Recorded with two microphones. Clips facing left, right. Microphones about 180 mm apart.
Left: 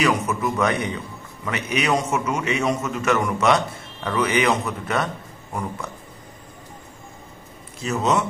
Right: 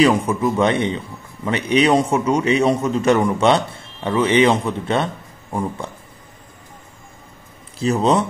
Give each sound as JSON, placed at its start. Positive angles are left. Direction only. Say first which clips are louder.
{"t": 0.0, "sound": "a man's voice", "louder": "right 6 dB", "side_deg": -30}
{"t": 7.8, "sound": "speech", "louder": "right 5 dB", "side_deg": -30}